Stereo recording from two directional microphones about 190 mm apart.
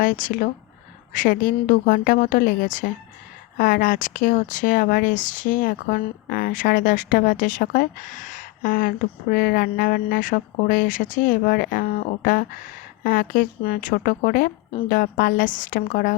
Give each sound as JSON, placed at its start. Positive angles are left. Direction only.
{"t": 0.0, "sound": "speech", "side_deg": 45}